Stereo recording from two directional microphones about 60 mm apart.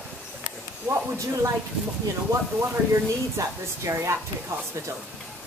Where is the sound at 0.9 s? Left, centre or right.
Right.